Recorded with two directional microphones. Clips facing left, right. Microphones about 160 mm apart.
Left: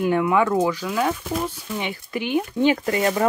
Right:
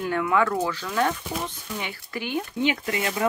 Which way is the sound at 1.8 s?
20° left (ahead or behind).